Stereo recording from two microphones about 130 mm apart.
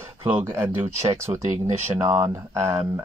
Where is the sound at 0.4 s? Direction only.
20° right (ahead or behind).